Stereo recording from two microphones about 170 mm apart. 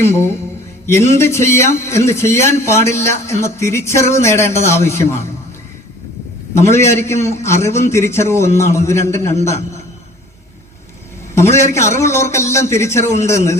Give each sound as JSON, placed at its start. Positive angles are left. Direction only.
{"t": 0.0, "sound": "a man's voice", "side_deg": 15}
{"t": 6.5, "sound": "a man's voice", "side_deg": 15}
{"t": 11.3, "sound": "a man's voice", "side_deg": 15}